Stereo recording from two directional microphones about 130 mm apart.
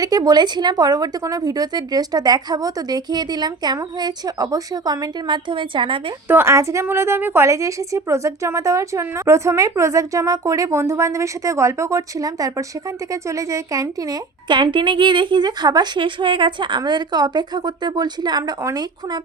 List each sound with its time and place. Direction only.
0.0 s a woman's voice: 30° right (ahead or behind)
6.2 s a woman's voice: 20° right (ahead or behind)